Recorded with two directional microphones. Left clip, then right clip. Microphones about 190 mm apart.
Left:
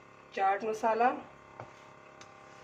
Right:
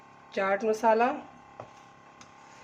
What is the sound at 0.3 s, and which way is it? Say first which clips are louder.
Speech: right 3 dB; 45° right (ahead or behind).